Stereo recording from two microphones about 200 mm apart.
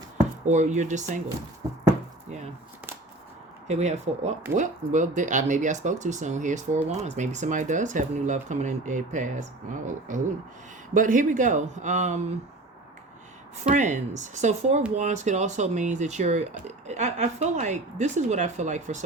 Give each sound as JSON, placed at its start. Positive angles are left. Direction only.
{"t": 0.4, "sound": "speech", "side_deg": -35}
{"t": 3.7, "sound": "speech", "side_deg": -35}
{"t": 13.7, "sound": "speech", "side_deg": -35}